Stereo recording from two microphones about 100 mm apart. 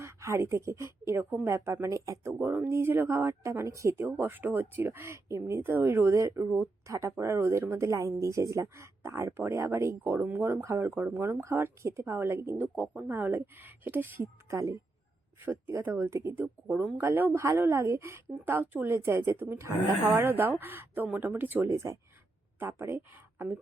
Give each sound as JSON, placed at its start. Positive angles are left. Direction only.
{"t": 0.0, "sound": "a woman's voice", "side_deg": -25}